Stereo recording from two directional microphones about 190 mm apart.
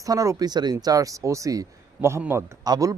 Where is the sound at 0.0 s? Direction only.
20° right (ahead or behind).